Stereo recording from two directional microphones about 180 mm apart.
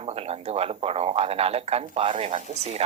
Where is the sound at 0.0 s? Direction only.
35° right (ahead or behind).